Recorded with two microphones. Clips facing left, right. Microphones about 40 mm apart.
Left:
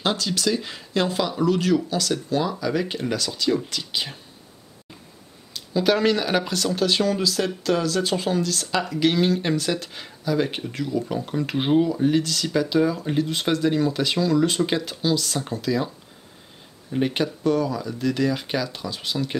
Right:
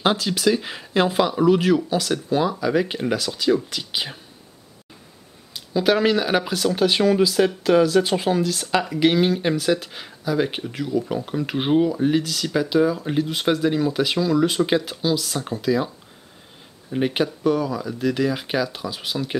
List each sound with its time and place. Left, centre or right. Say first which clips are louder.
0.0 s speech: right 4 dB; centre
5.5 s speech: right 1 dB; centre
16.9 s speech: right 1 dB; centre